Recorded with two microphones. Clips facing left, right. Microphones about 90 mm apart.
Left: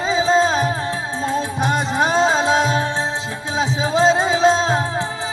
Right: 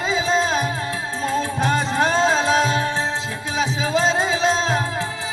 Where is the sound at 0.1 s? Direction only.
30° left (ahead or behind).